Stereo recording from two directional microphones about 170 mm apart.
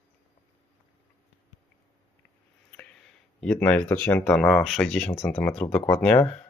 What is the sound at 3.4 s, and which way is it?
Speech, 5° left (ahead or behind).